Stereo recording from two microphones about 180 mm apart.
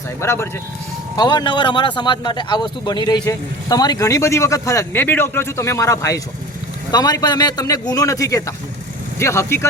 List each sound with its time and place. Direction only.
0.2 s a man's voice: 15° left (ahead or behind)